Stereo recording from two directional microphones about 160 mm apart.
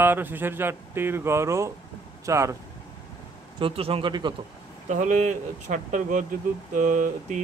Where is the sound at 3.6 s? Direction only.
35° right (ahead or behind).